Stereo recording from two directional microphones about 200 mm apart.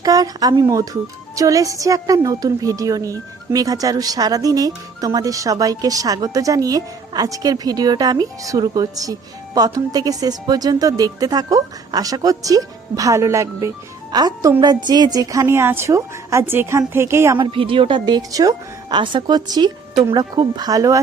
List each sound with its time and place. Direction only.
0.0 s a woman's voice: 20° right (ahead or behind)
17.3 s a woman's voice: 25° right (ahead or behind)